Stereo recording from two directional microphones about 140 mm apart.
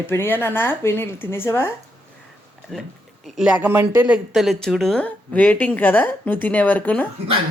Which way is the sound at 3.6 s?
15° right (ahead or behind).